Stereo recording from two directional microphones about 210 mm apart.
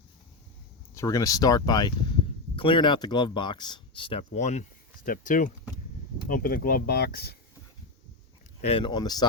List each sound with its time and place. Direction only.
0.9 s speech: 15° left (ahead or behind); by 7.3 s 50° left (ahead or behind)
8.6 s speech: 25° left (ahead or behind)